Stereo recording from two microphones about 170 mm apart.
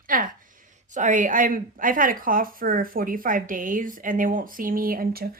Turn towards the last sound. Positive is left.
turn(degrees=-60)  # may be behind; listen again after turning